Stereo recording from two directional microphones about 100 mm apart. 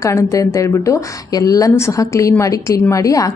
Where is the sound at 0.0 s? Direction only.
30° left (ahead or behind).